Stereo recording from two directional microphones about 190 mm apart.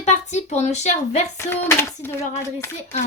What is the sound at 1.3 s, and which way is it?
Speech, 15° left (ahead or behind).